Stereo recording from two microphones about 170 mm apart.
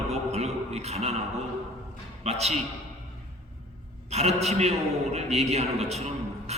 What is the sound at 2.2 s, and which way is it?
Speech, 40° right (ahead or behind).